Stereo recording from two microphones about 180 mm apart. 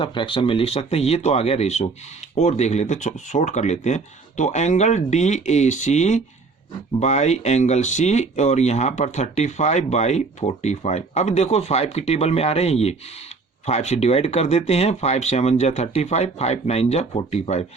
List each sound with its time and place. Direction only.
0.0 s speech: 25° left (ahead or behind)